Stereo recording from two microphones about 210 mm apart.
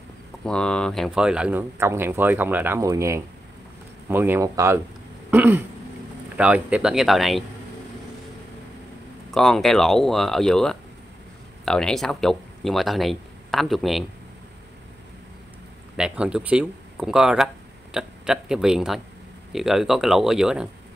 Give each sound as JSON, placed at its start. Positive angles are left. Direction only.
{"t": 0.5, "sound": "speech", "side_deg": 5}
{"t": 5.3, "sound": "throat clearing", "side_deg": -10}
{"t": 6.3, "sound": "speech", "side_deg": -5}
{"t": 9.3, "sound": "speech", "side_deg": 0}
{"t": 16.0, "sound": "speech", "side_deg": -5}